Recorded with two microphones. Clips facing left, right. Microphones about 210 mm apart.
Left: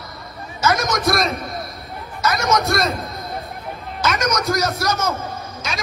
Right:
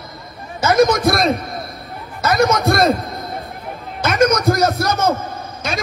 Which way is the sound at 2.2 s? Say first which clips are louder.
Right 4 dB; 55° right (ahead or behind).